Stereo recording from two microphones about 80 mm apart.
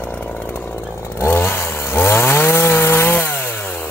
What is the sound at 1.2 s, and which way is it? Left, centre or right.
Chainsaw, left.